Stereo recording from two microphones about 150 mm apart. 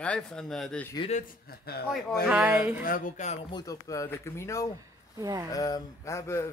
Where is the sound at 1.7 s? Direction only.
90° left.